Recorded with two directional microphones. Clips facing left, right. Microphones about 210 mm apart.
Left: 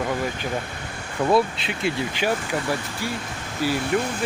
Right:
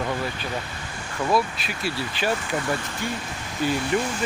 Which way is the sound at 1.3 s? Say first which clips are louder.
Left 3 dB; 25° left (ahead or behind).